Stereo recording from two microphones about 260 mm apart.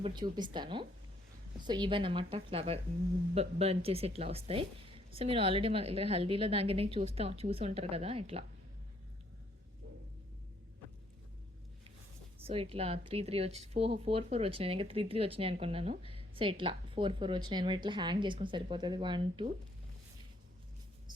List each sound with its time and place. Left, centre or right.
0.0 s a woman's voice: centre
12.4 s speech: right